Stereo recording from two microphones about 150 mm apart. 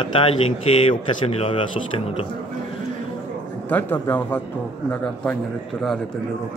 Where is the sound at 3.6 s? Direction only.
10° left (ahead or behind).